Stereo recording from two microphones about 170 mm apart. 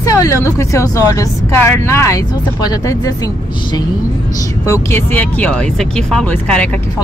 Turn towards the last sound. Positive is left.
turn(degrees=5)  # may be behind; listen again after turning